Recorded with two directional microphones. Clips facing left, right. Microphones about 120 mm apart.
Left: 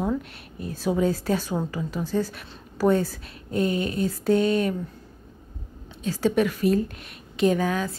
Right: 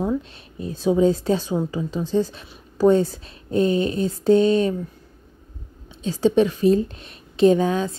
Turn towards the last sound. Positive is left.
turn(degrees=-25)  # may be behind; listen again after turning